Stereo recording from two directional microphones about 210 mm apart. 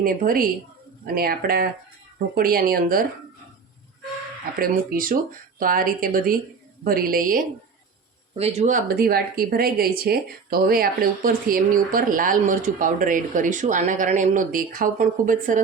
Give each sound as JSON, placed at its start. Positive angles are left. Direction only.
{"t": 0.0, "sound": "speech", "side_deg": -40}
{"t": 4.6, "sound": "speech", "side_deg": -45}
{"t": 8.4, "sound": "speech", "side_deg": -30}